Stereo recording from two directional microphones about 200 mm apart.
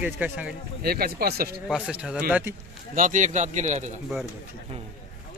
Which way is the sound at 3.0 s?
40° right (ahead or behind).